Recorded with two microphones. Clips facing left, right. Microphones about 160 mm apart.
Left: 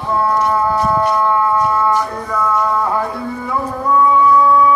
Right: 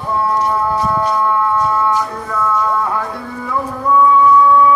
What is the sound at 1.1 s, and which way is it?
Music, centre (ahead or behind).